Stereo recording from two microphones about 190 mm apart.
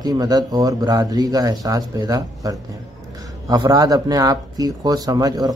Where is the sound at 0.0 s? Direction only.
20° right (ahead or behind).